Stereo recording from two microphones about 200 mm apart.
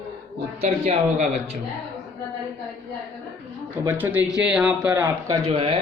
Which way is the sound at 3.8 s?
10° right (ahead or behind).